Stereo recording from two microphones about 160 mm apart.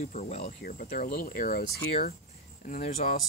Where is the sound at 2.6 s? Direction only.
55° left (ahead or behind).